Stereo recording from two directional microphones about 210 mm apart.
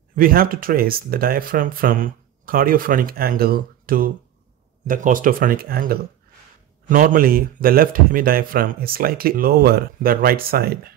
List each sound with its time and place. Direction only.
0.1 s speech: 45° right (ahead or behind)